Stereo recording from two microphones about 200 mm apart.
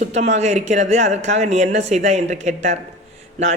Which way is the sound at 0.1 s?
35° right (ahead or behind).